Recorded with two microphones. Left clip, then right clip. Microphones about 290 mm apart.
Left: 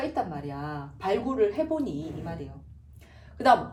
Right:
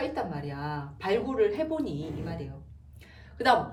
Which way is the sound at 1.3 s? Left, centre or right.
Centre.